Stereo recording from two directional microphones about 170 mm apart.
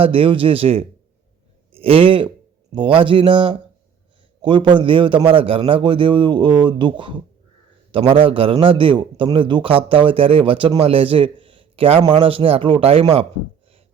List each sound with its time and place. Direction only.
0.0 s a man's voice: 30° right (ahead or behind)